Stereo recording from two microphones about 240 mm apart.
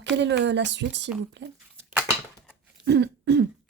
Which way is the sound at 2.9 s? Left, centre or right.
Right.